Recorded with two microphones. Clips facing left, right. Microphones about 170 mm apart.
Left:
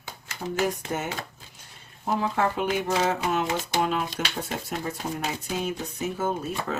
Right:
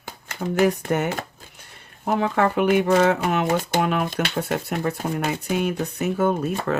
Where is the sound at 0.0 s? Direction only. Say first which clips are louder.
Right 5 dB; 55° right (ahead or behind).